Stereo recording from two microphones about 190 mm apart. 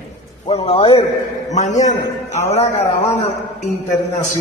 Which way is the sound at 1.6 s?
40° left (ahead or behind).